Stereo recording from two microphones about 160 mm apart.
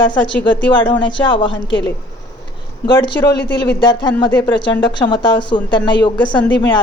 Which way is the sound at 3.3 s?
90° left.